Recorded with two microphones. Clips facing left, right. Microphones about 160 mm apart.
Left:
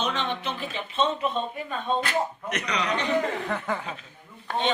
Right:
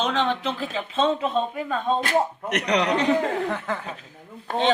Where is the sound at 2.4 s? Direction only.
70° right (ahead or behind).